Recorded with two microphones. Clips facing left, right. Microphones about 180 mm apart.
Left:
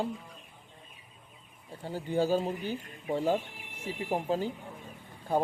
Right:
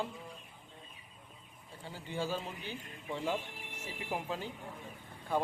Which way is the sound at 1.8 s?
40° left (ahead or behind).